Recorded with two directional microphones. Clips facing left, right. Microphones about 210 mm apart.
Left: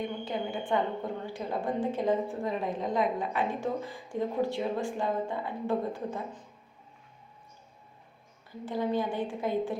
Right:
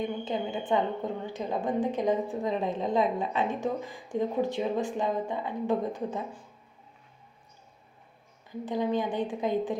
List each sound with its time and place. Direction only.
0.0 s a sound: 20° right (ahead or behind)
1.2 s a woman's voice: 20° right (ahead or behind)
8.6 s a woman's voice: 15° right (ahead or behind)